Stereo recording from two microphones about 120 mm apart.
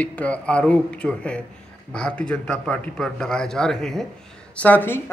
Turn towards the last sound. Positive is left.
turn(degrees=15)  # may be behind; listen again after turning